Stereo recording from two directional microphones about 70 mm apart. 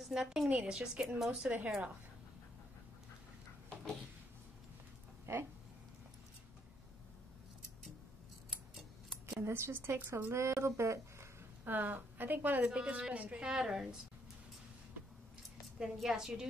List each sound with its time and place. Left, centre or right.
0.0 s a woman's voice: centre
5.2 s a sound: right
9.4 s speech: right
11.7 s a woman's voice: right
12.6 s a woman's voice: centre
15.8 s a woman's voice: centre